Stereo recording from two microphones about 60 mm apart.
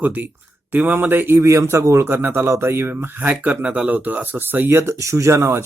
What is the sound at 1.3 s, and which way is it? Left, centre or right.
Speech, right.